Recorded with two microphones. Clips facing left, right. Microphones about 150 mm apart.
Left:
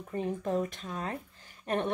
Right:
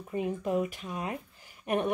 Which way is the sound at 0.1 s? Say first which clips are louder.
Right 1 dB; 10° right (ahead or behind).